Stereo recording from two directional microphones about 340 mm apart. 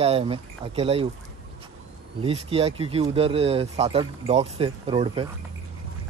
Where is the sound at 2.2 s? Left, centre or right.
Centre.